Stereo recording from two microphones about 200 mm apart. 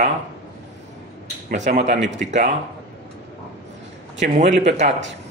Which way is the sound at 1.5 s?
35° right (ahead or behind).